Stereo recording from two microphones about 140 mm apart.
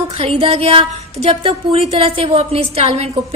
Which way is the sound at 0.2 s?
45° right (ahead or behind).